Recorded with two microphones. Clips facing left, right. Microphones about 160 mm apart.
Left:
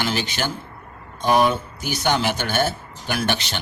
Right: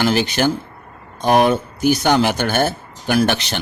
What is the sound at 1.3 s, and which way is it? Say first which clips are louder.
Speech: right 4 dB; 60° right (ahead or behind).